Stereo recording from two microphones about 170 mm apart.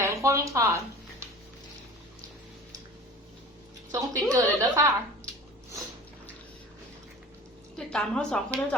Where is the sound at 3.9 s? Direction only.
20° right (ahead or behind).